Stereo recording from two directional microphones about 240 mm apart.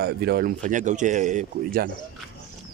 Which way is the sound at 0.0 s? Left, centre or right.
Right.